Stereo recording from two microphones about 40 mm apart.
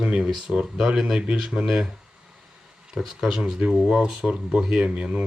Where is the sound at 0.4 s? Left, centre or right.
Centre.